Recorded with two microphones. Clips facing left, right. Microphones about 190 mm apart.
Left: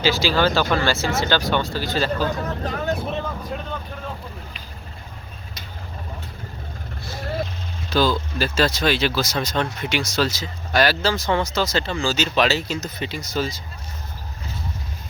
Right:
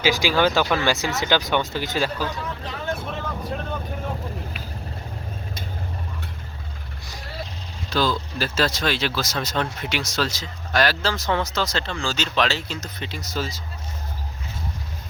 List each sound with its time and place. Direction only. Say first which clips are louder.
0.0 s speech: even; 15° right (ahead or behind)
2.2 s speech: left 5 dB; 45° left (ahead or behind)
7.2 s vehicle: left 9 dB; 50° left (ahead or behind)
7.9 s speech: left 3 dB; centre (ahead or behind)